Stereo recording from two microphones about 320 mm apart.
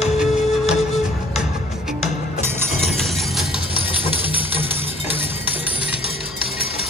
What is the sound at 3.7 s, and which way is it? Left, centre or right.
Music, centre.